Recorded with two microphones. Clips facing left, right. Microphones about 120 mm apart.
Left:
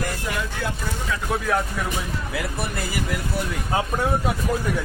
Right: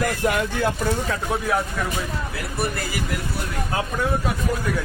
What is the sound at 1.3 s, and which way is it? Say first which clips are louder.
Speech: left 1 dB; 10° right (ahead or behind).